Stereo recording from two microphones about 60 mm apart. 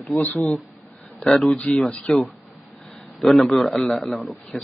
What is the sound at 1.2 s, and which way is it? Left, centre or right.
Speech, centre.